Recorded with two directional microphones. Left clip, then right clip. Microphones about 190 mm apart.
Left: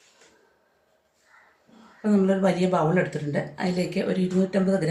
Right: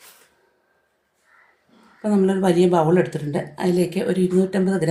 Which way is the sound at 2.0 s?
55° right (ahead or behind).